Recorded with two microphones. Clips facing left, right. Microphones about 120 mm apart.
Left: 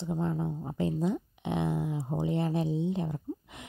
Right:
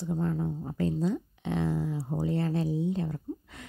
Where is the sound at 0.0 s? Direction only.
20° left (ahead or behind).